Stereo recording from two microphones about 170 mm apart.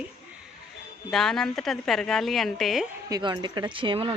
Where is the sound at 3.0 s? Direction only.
25° right (ahead or behind).